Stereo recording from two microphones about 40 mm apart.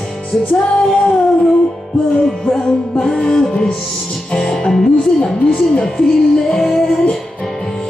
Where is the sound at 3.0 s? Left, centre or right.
Centre.